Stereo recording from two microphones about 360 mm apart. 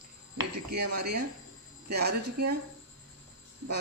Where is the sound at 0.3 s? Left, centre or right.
Right.